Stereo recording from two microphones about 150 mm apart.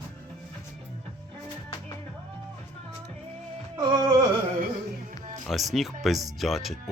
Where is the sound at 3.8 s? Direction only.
25° right (ahead or behind).